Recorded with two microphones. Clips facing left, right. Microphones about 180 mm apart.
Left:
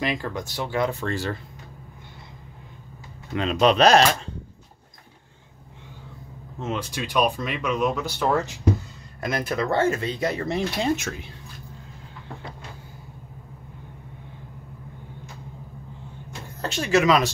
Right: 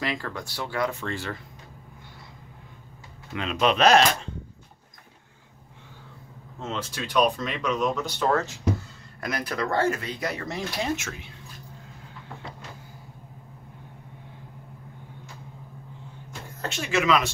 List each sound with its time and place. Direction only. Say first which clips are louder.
0.0 s speech: left 4 dB; 20° left (ahead or behind)
1.0 s speech: left 5 dB; 40° left (ahead or behind)
3.3 s speech: left 4 dB; 35° left (ahead or behind)
6.6 s speech: left 3 dB; 15° left (ahead or behind)
9.2 s speech: left 3 dB; 25° left (ahead or behind)
16.6 s speech: left 5 dB; 35° left (ahead or behind)